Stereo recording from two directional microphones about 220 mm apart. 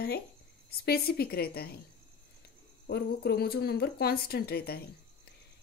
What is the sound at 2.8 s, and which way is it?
A woman's voice, 45° left (ahead or behind).